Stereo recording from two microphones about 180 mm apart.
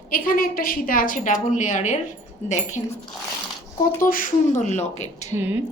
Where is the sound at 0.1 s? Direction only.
55° left (ahead or behind).